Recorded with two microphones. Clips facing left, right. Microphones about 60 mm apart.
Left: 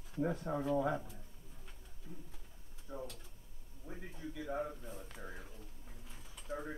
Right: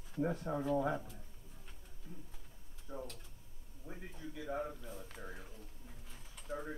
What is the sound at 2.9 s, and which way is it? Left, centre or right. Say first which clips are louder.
Speech: even; centre.